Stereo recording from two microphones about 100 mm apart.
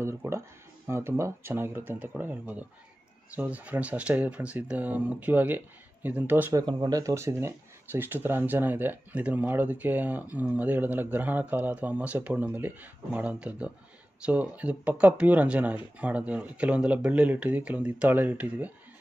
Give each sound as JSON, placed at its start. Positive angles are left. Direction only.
{"t": 0.0, "sound": "a sound", "side_deg": -25}
{"t": 0.8, "sound": "speech", "side_deg": -25}
{"t": 6.6, "sound": "speech", "side_deg": -45}
{"t": 7.0, "sound": "speech", "side_deg": -30}